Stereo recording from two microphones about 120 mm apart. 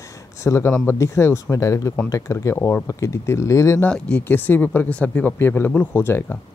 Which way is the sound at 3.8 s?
10° left (ahead or behind).